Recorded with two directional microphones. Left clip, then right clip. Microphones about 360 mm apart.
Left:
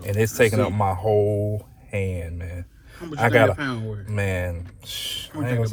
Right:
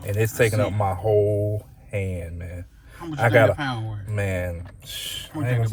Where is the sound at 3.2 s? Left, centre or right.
Centre.